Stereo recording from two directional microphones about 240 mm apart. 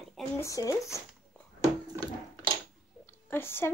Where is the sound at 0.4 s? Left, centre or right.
Centre.